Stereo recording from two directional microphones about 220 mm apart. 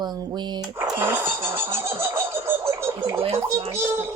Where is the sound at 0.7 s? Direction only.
10° right (ahead or behind).